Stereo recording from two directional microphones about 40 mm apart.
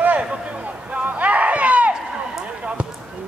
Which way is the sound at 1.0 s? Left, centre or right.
Right.